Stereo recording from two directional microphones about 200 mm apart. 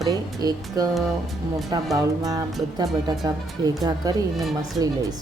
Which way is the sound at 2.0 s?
15° right (ahead or behind).